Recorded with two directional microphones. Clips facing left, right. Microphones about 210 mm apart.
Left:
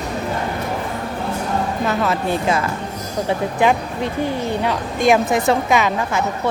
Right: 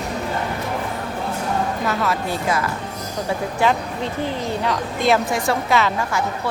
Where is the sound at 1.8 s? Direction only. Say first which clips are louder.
Left 3 dB; 20° left (ahead or behind).